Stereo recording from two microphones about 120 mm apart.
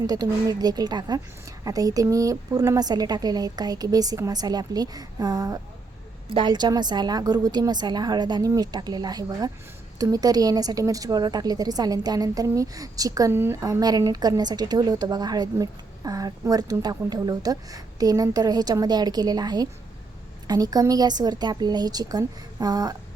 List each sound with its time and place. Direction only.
0.1 s a woman's voice: 35° right (ahead or behind)